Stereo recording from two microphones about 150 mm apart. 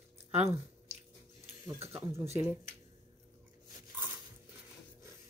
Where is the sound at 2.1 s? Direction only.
15° right (ahead or behind).